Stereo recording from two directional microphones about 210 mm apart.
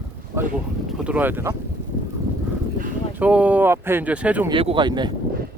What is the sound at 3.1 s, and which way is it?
Speech, 5° right (ahead or behind).